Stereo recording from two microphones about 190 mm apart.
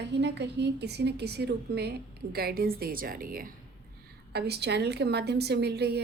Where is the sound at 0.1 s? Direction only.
65° right (ahead or behind); by 3.5 s 50° right (ahead or behind).